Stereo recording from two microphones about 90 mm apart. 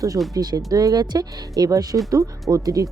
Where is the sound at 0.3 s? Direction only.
45° right (ahead or behind).